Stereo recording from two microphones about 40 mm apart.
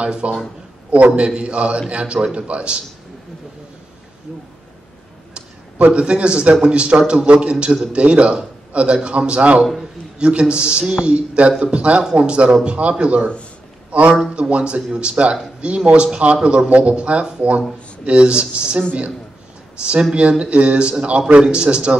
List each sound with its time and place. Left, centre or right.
0.0 s a man's voice: right
5.3 s a sound: right
6.6 s a man's voice: right
11.1 s a man's voice: right
19.8 s a man's voice: right